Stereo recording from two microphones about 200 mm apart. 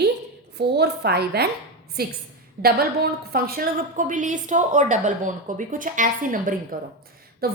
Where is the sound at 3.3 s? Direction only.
45° right (ahead or behind).